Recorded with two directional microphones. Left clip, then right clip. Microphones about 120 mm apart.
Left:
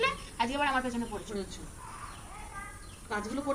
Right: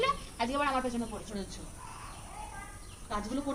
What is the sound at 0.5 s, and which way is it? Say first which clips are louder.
Speech: even; 20° right (ahead or behind).